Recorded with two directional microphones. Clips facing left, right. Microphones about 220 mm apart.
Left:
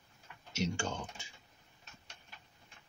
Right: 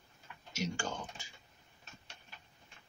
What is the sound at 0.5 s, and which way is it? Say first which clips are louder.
Speech: left 2 dB; 25° left (ahead or behind).